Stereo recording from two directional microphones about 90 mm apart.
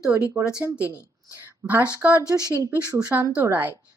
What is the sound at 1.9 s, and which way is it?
A woman's voice, 15° right (ahead or behind).